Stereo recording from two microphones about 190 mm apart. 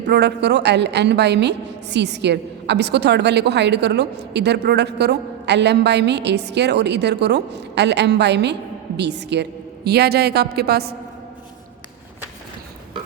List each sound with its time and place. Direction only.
0.0 s a woman's voice: 60° right (ahead or behind)